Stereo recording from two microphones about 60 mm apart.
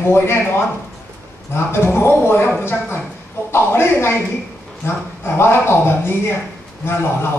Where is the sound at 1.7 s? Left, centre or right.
Left.